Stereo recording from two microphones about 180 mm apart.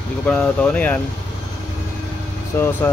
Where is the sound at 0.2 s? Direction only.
5° left (ahead or behind).